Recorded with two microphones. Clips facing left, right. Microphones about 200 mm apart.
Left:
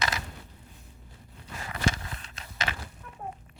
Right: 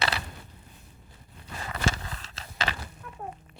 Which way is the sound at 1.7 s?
30° right (ahead or behind).